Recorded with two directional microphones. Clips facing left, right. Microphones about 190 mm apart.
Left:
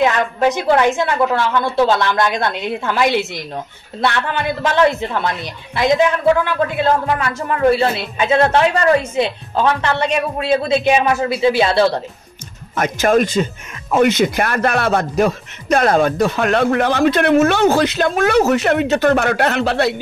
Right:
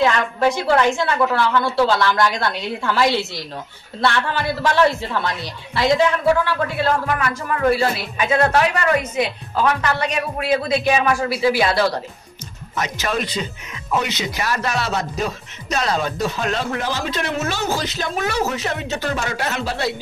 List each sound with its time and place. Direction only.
0.0 s a woman's voice: 20° left (ahead or behind)
12.7 s a man's voice: 50° left (ahead or behind)